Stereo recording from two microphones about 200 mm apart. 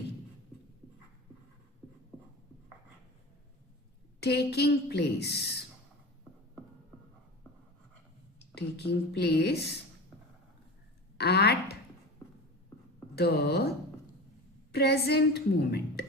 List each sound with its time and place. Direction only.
4.2 s a woman's voice: 55° left (ahead or behind)
8.5 s a woman's voice: 55° left (ahead or behind)
11.2 s speech: 55° left (ahead or behind)
13.1 s a woman's voice: 55° left (ahead or behind)